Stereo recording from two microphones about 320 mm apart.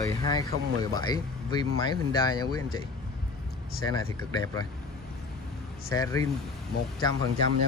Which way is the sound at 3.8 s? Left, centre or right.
Centre.